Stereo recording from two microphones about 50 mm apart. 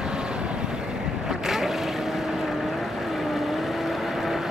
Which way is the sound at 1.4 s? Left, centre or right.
Centre.